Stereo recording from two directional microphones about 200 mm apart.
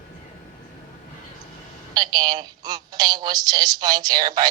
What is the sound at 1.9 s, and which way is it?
A woman's voice, 20° right (ahead or behind).